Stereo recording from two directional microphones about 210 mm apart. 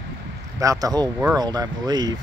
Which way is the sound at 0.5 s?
15° right (ahead or behind).